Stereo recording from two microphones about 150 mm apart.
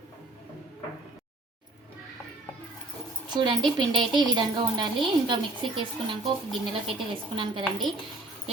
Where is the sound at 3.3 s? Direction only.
30° right (ahead or behind).